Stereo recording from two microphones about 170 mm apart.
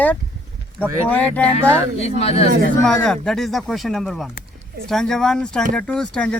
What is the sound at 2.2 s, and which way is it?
Speech, 35° left (ahead or behind).